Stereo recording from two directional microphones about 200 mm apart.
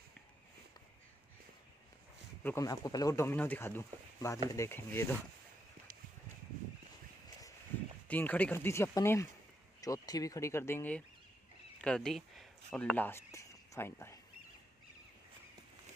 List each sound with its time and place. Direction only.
2.4 s speech: 15° left (ahead or behind)
8.1 s speech: 10° left (ahead or behind)